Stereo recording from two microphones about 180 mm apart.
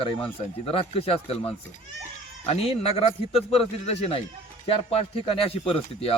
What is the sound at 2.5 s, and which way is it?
A man's voice, 35° left (ahead or behind).